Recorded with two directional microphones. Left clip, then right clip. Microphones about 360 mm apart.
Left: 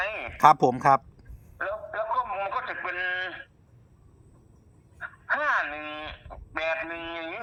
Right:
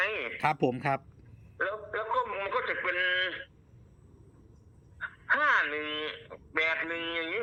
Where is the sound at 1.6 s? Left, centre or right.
Centre.